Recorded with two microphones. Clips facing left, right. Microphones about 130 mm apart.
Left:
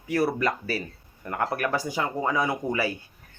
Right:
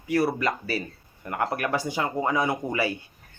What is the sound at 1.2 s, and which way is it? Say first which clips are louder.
Speech: even; 20° right (ahead or behind).